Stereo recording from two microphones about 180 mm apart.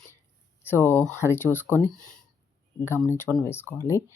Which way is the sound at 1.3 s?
10° left (ahead or behind).